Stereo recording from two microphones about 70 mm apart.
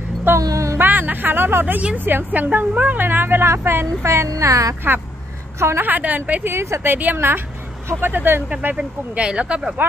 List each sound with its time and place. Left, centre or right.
0.4 s music: right
0.7 s a sound: right
2.0 s a woman's voice: right
5.6 s a woman's voice: right
5.9 s a woman's voice: right
6.5 s a woman's voice: right
8.7 s speech: centre
9.8 s speech: right